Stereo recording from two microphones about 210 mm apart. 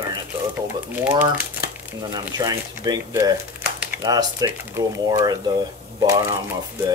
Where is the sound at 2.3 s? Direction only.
20° right (ahead or behind).